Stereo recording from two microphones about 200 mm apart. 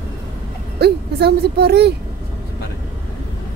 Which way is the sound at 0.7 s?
55° right (ahead or behind).